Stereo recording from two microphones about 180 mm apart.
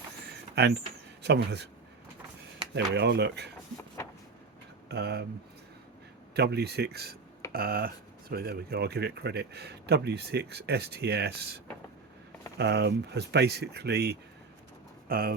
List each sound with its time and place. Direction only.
1.2 s speech: 65° right (ahead or behind)
2.7 s speech: 70° right (ahead or behind)
4.9 s speech: 70° right (ahead or behind)
6.3 s speech: 65° right (ahead or behind)